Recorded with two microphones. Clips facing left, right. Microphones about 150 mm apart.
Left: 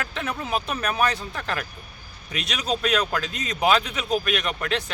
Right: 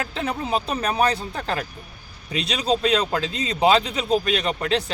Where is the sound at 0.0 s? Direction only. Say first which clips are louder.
Right 3 dB; 30° right (ahead or behind).